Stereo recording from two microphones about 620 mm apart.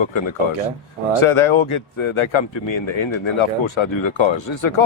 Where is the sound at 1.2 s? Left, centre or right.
Left.